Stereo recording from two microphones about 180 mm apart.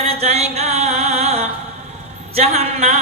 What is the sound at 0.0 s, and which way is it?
Mantra, 35° right (ahead or behind).